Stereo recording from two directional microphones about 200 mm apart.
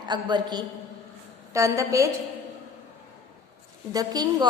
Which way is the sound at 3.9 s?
20° right (ahead or behind).